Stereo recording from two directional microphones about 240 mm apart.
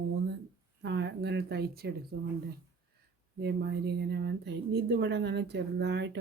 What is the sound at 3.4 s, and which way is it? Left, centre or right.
Speech, right.